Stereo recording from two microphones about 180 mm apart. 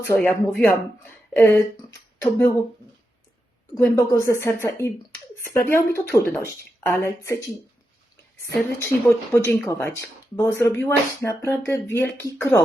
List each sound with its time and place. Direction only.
0.0 s speech: 10° left (ahead or behind)
3.8 s speech: 15° left (ahead or behind)
8.4 s speech: 15° left (ahead or behind)